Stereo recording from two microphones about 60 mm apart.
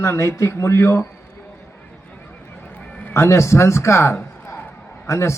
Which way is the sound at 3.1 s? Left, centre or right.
Left.